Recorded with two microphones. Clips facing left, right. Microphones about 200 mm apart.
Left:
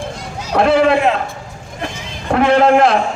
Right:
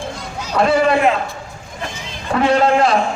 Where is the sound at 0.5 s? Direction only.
55° left (ahead or behind).